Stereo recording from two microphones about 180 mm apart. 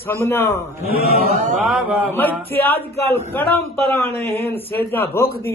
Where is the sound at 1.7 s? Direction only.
5° right (ahead or behind).